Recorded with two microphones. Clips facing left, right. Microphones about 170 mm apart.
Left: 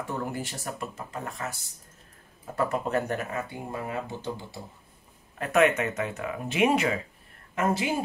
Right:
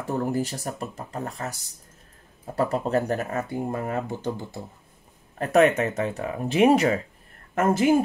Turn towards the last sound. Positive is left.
turn(degrees=-50)  # may be behind; listen again after turning